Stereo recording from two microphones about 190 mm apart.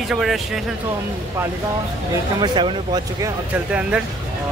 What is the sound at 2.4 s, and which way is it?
Speech, 25° right (ahead or behind).